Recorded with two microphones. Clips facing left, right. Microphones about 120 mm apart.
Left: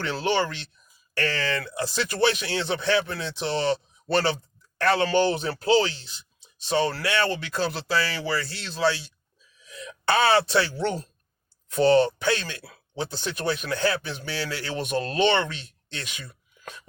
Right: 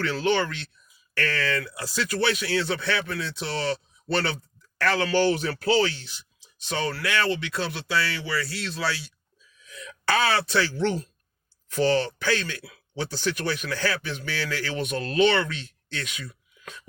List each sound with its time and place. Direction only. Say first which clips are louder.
0.1 s speech: left 2 dB; 30° left (ahead or behind)
4.8 s speech: left 1 dB; 25° left (ahead or behind)
6.7 s speech: left 4 dB; 30° left (ahead or behind)